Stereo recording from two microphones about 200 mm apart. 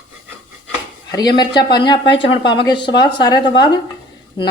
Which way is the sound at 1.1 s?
20° left (ahead or behind).